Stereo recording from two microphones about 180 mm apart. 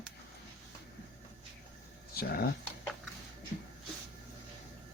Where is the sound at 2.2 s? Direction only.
55° left (ahead or behind).